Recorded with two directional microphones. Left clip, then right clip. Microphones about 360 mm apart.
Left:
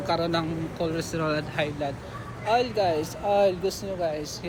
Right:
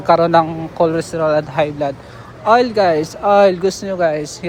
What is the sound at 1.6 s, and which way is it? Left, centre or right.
Speech, right.